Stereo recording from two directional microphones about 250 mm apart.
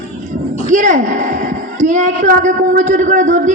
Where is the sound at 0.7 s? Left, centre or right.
Right.